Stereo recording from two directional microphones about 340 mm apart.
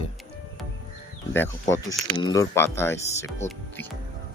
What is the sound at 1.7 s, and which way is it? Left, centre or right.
Speech, centre.